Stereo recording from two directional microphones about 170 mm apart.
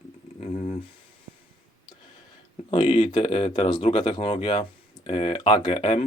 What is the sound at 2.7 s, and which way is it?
Speech, 30° left (ahead or behind).